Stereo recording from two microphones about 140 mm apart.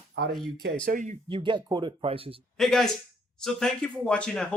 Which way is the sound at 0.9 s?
65° right (ahead or behind).